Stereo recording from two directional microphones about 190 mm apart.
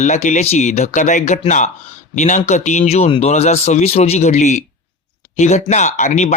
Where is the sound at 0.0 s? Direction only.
40° left (ahead or behind).